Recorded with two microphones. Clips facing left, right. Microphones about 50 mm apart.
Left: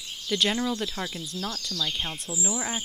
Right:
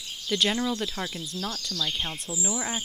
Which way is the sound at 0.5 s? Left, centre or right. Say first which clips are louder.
Even; left.